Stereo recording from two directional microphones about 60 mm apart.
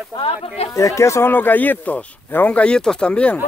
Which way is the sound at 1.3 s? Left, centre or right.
Left.